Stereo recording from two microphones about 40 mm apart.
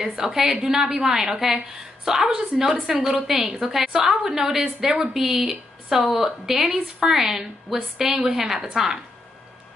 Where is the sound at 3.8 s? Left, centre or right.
Centre.